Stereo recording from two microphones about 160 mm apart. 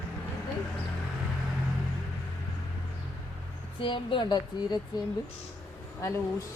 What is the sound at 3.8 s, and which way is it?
Speech, 30° left (ahead or behind).